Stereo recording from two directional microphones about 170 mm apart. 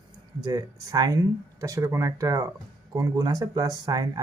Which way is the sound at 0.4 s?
20° right (ahead or behind).